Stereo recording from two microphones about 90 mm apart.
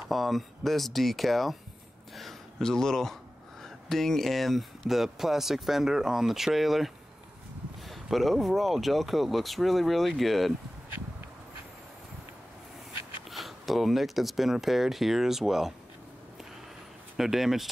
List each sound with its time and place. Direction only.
0.1 s speech: centre (ahead or behind)
7.9 s speech: centre (ahead or behind)
13.3 s speech: centre (ahead or behind)
17.2 s speech: 5° right (ahead or behind)